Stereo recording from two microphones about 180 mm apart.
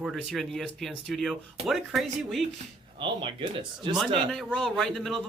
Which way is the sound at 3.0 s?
25° right (ahead or behind).